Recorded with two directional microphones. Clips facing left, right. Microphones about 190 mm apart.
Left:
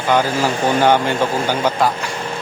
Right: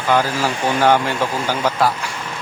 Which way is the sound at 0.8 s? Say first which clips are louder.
Even; centre (ahead or behind).